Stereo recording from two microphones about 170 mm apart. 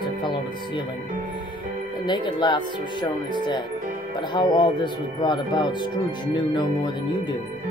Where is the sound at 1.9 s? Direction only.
25° left (ahead or behind).